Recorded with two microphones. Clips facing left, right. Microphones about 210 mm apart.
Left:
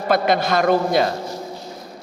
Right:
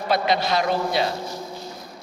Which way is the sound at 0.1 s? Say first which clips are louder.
Left 4 dB; 50° left (ahead or behind).